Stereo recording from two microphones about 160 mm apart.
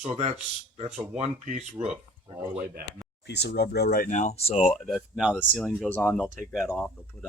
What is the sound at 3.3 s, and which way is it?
Speech, 90° left.